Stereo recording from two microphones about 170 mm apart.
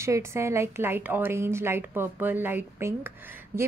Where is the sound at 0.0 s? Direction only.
15° right (ahead or behind).